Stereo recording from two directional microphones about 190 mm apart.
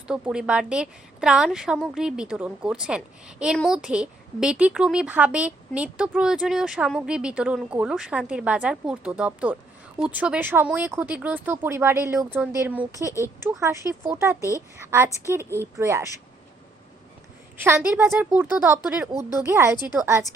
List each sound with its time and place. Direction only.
0.1 s a woman's voice: 5° right (ahead or behind)
13.1 s a woman's voice: 15° left (ahead or behind)
13.4 s speech: 15° right (ahead or behind)
17.6 s speech: 10° right (ahead or behind)